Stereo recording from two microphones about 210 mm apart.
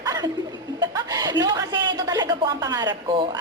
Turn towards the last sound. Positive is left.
turn(degrees=-25)  # may be behind; listen again after turning